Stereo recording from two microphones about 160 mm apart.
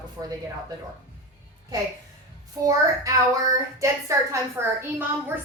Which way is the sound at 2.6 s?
20° right (ahead or behind).